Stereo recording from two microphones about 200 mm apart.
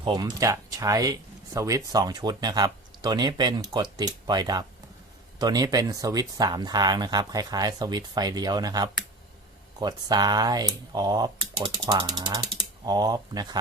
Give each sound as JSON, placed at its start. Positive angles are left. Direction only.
{"t": 0.0, "sound": "speech", "side_deg": -20}